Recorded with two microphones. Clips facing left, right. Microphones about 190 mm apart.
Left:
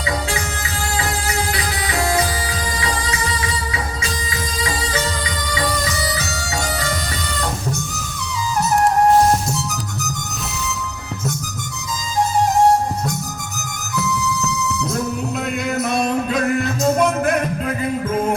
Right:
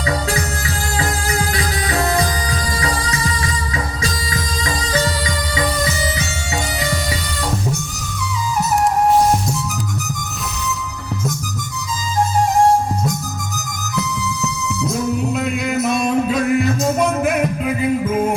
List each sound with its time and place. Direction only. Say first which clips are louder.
4.0 s music: right 2 dB; 40° right (ahead or behind)
15.4 s music: right 2 dB; 5° right (ahead or behind)